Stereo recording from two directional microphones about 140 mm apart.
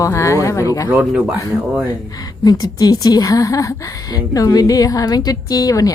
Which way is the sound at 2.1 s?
25° left (ahead or behind).